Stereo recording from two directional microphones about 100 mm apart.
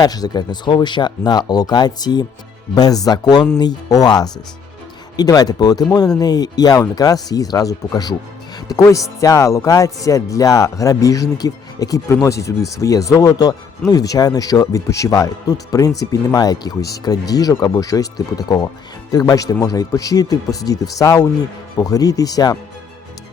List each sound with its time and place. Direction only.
0.0 s speech: 40° left (ahead or behind)